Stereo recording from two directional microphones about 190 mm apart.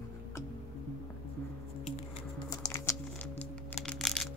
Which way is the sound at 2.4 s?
15° left (ahead or behind).